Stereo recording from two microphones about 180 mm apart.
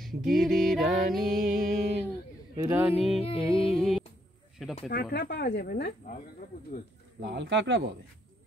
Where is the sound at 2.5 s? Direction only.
15° right (ahead or behind).